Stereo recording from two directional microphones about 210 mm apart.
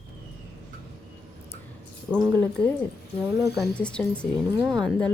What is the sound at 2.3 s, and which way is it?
Speech, 5° left (ahead or behind).